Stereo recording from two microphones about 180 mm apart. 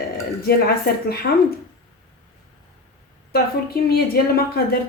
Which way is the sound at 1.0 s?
60° left (ahead or behind).